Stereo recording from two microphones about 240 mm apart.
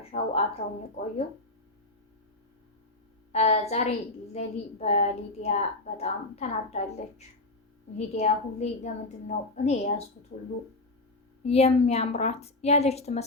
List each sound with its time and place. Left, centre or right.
0.0 s speech: left
3.3 s a woman's voice: left
11.4 s a woman's voice: left